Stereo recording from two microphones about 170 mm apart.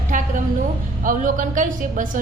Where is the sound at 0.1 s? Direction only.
45° right (ahead or behind).